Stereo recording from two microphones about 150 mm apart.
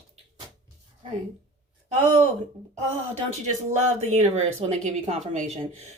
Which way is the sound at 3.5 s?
50° right (ahead or behind).